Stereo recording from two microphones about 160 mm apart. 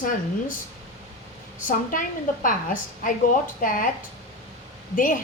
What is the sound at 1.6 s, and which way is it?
A woman's voice, 55° left (ahead or behind).